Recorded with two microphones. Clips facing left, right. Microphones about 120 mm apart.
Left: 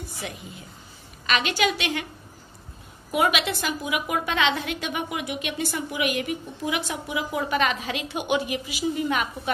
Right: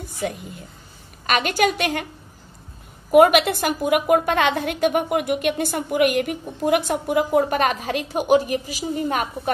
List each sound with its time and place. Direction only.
0.2 s a woman's voice: 50° right (ahead or behind)
3.1 s a woman's voice: 55° right (ahead or behind)